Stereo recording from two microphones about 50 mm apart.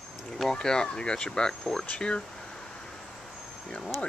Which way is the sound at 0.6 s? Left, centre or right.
Centre.